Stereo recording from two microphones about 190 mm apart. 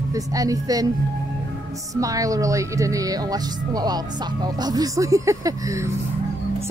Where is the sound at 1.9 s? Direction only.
20° right (ahead or behind).